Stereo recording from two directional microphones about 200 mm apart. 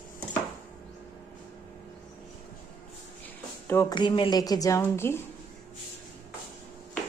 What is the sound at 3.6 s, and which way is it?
A woman's voice, 15° left (ahead or behind).